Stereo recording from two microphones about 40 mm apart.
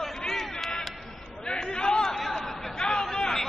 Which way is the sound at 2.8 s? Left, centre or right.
Centre.